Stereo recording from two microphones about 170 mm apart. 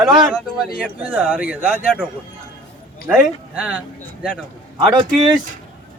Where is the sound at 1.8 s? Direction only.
5° left (ahead or behind).